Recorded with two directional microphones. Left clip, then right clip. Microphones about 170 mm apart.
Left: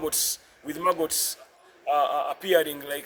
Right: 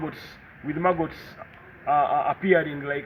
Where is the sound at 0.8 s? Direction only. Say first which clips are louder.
Even; 50° left (ahead or behind).